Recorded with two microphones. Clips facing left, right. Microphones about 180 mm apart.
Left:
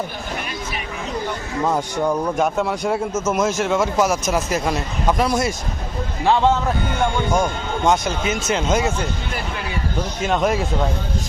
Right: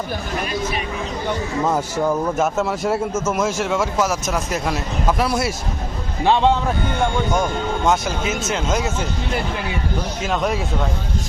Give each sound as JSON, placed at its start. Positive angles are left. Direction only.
{"t": 1.6, "sound": "speech", "side_deg": -5}
{"t": 7.3, "sound": "speech", "side_deg": 0}
{"t": 10.2, "sound": "speech", "side_deg": 0}